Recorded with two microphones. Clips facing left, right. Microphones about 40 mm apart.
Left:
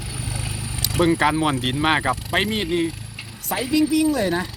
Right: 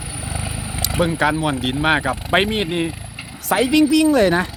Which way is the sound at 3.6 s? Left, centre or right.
Right.